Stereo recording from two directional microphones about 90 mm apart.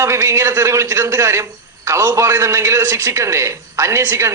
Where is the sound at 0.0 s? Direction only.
30° right (ahead or behind).